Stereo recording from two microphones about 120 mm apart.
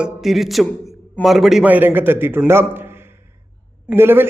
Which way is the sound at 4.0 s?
20° right (ahead or behind).